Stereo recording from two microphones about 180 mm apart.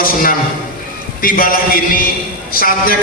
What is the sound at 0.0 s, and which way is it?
A man's voice, 50° left (ahead or behind).